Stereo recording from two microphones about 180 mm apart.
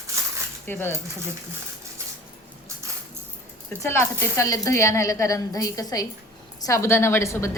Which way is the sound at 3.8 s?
15° left (ahead or behind).